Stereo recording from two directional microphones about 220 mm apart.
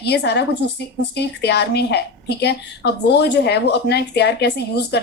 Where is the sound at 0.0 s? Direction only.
50° left (ahead or behind).